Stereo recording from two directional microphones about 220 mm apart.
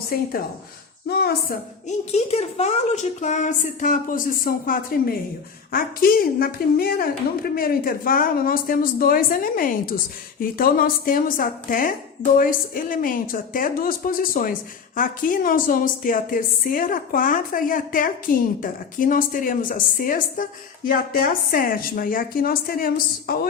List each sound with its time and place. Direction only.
0.1 s a woman's voice: 45° left (ahead or behind)
1.9 s a woman's voice: 30° left (ahead or behind)